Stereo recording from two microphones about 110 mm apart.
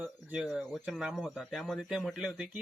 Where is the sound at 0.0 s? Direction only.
15° right (ahead or behind).